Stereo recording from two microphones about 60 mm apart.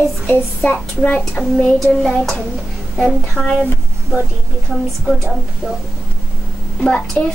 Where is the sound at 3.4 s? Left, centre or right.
Right.